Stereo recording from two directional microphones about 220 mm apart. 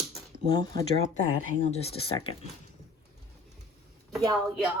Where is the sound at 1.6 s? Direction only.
30° left (ahead or behind).